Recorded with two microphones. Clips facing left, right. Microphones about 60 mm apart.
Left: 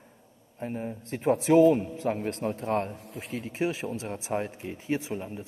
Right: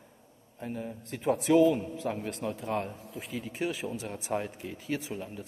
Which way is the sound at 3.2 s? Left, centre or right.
Left.